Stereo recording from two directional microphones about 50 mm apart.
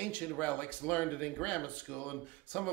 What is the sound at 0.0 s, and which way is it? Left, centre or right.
Speech, left.